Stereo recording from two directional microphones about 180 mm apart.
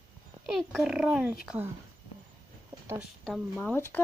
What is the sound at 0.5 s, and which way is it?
Speech, centre (ahead or behind).